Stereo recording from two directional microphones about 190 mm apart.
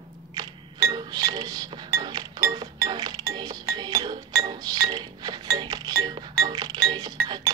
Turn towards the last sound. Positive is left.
turn(degrees=-20)  # may be behind; listen again after turning